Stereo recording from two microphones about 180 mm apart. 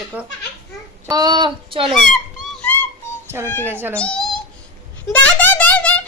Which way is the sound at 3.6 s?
10° right (ahead or behind).